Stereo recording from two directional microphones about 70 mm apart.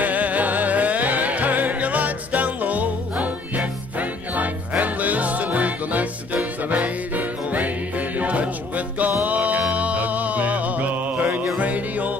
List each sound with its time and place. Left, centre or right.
0.0 s music: right